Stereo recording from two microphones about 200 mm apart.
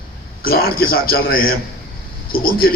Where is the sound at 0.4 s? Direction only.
50° left (ahead or behind).